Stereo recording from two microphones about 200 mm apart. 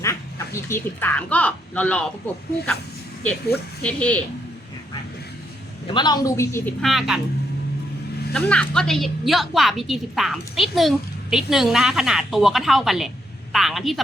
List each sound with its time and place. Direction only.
0.0 s speech: 15° left (ahead or behind)
5.9 s speech: 20° left (ahead or behind)
6.8 s a woman's voice: centre (ahead or behind)
8.3 s a woman's voice: 5° left (ahead or behind)